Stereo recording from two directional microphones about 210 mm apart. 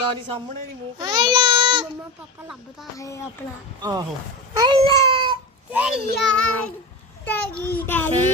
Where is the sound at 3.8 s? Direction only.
20° right (ahead or behind).